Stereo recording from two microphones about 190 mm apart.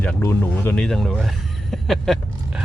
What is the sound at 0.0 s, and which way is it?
Speech, 10° left (ahead or behind).